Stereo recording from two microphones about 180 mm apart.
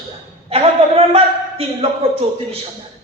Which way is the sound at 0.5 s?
35° right (ahead or behind).